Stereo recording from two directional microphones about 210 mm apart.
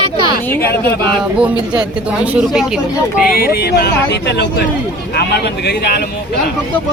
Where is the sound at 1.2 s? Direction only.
5° right (ahead or behind).